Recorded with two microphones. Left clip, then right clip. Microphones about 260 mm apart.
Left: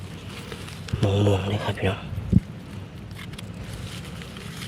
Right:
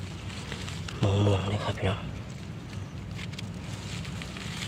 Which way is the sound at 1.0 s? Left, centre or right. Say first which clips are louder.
Left 5 dB; centre.